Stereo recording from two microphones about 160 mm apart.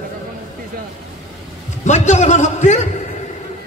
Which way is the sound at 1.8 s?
45° left (ahead or behind).